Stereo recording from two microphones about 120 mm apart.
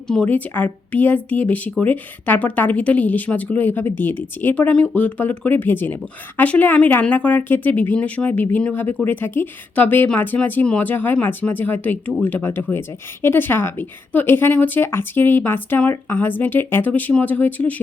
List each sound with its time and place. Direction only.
0.3 s a woman's voice: 15° left (ahead or behind)